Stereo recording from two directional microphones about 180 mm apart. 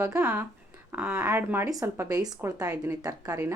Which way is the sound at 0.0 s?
10° right (ahead or behind).